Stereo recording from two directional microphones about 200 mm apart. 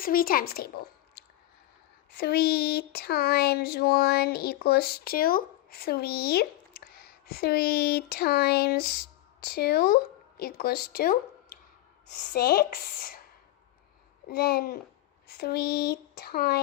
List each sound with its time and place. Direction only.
0.0 s speech: 45° left (ahead or behind)
12.3 s speech: 50° left (ahead or behind)
14.3 s speech: 50° left (ahead or behind)